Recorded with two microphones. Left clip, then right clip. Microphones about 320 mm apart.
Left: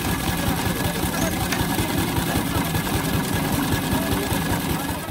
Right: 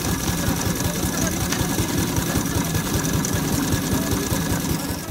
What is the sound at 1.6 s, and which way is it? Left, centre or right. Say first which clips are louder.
Vehicle: left 1 dB; centre.